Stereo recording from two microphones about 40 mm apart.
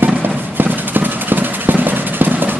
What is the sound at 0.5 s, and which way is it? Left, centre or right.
Vehicle, right.